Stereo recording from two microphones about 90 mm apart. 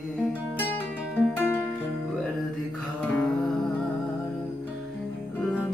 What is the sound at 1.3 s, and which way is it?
Music, 25° left (ahead or behind).